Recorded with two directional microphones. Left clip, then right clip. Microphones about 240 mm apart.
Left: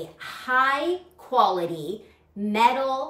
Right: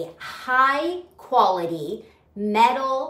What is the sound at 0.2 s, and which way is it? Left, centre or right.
Speech, centre.